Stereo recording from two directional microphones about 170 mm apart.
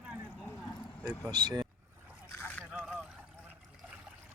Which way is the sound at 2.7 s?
5° right (ahead or behind).